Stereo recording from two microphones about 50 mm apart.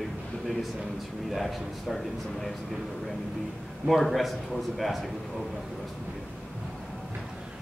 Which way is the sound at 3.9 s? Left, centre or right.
Centre.